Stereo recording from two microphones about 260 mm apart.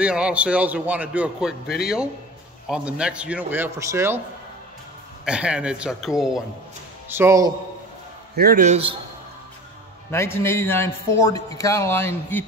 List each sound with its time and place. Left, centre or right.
0.0 s a man's voice: centre
5.2 s a man's voice: centre
8.4 s a man's voice: right
10.1 s a man's voice: centre